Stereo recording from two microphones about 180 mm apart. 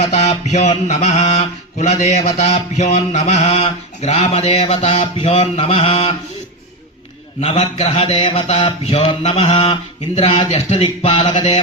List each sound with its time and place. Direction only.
0.0 s mantra: 40° left (ahead or behind)
7.4 s mantra: 35° left (ahead or behind)